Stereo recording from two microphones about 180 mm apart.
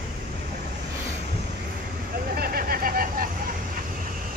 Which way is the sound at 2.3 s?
55° right (ahead or behind).